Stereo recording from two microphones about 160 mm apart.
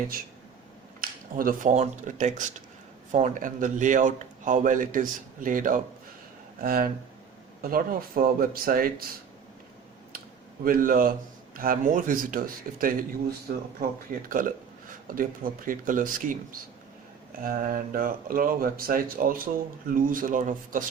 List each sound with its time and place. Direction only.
1.0 s speech: 60° right (ahead or behind)
10.6 s speech: 60° right (ahead or behind)
14.3 s speech: 60° right (ahead or behind)
17.4 s speech: 60° right (ahead or behind)